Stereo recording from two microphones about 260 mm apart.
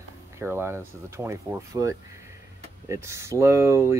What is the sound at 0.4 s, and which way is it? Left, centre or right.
Speech, centre.